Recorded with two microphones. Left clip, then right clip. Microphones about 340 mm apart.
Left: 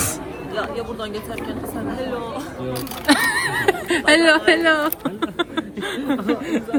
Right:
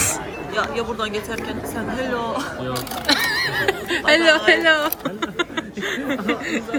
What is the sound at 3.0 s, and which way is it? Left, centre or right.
Speech, left.